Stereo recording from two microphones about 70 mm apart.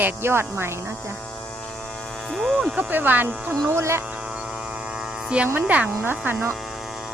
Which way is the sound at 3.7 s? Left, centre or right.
Right.